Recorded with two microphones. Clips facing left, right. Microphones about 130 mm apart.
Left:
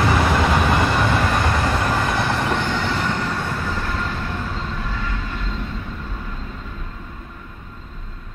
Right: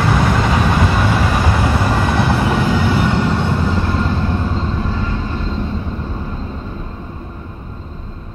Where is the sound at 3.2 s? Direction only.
25° right (ahead or behind).